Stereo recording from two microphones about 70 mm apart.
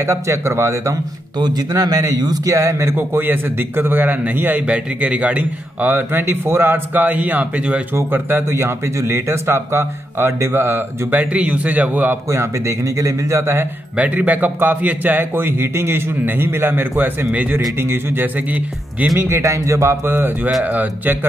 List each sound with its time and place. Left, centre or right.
0.0 s speech: right
1.4 s a man's voice: right; by 7.8 s centre
7.9 s a man's voice: right
12.3 s speech: right
13.9 s a man's voice: right
17.3 s a man's voice: right
17.7 s speech: right
19.1 s a man's voice: right